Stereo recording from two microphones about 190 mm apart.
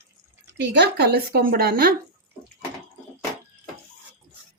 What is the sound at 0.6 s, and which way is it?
Speech, 60° right (ahead or behind).